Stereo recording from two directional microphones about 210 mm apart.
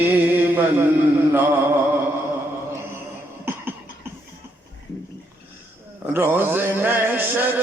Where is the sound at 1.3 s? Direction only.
10° right (ahead or behind).